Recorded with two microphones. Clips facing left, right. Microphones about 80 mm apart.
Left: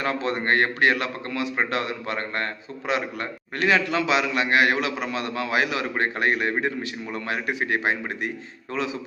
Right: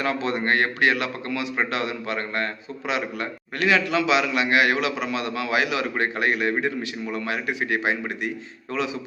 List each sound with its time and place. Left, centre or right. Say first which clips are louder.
0.0 s a man's voice: right 1 dB; left